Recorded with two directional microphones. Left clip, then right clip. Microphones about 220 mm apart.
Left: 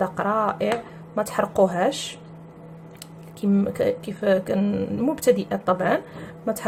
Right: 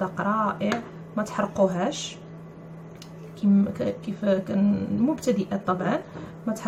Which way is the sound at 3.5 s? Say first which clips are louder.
Left 5 dB; 40° left (ahead or behind).